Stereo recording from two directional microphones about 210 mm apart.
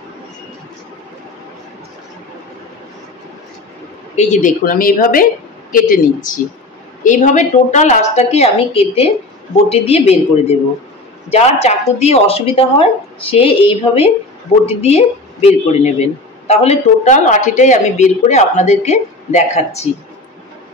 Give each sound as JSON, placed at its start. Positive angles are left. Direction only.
{"t": 4.1, "sound": "a woman's voice", "side_deg": 35}
{"t": 11.2, "sound": "a woman's voice", "side_deg": 30}